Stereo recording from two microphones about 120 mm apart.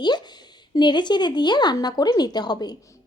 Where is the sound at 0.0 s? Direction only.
35° left (ahead or behind).